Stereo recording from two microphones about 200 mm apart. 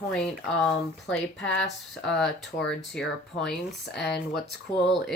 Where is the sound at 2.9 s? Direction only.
Centre (ahead or behind).